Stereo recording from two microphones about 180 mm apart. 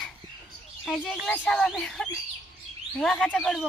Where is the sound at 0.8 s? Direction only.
Centre (ahead or behind).